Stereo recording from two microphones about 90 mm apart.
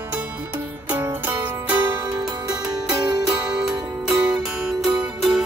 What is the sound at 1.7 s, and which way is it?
Music, 50° right (ahead or behind).